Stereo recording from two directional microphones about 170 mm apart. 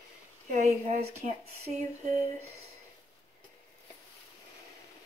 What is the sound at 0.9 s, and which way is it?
Speech, 45° right (ahead or behind).